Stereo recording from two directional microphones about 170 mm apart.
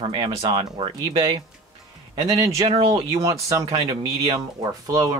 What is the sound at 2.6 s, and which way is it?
Speech, 30° right (ahead or behind).